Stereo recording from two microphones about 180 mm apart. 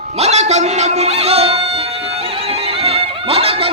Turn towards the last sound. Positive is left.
turn(degrees=-30)  # may be behind; listen again after turning